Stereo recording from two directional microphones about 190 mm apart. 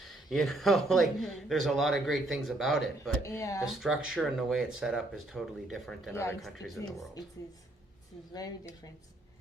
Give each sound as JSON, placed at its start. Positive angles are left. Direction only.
{"t": 0.3, "sound": "speech", "side_deg": 0}
{"t": 3.2, "sound": "speech", "side_deg": 15}
{"t": 3.7, "sound": "speech", "side_deg": 0}
{"t": 8.3, "sound": "a woman's voice", "side_deg": 20}